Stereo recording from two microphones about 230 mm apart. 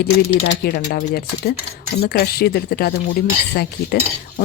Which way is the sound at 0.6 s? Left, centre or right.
Left.